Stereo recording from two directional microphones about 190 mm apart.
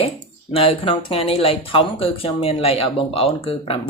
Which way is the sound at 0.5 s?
30° left (ahead or behind).